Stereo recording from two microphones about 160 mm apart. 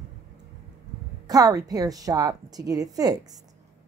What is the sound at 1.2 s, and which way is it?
A woman's voice, 20° right (ahead or behind).